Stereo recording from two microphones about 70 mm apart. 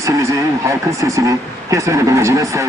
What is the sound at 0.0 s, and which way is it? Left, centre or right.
Vehicle, right.